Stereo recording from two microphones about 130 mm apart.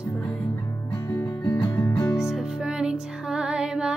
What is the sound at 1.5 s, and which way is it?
Music, 35° left (ahead or behind).